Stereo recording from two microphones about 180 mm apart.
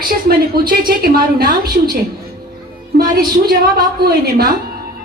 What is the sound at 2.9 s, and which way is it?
A woman's voice, 60° right (ahead or behind).